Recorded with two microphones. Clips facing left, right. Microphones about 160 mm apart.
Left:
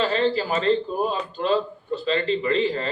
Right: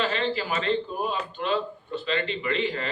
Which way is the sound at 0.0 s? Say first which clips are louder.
Left 5 dB; 35° left (ahead or behind).